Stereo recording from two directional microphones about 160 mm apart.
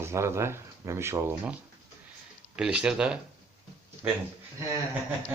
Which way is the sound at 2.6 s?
5° right (ahead or behind).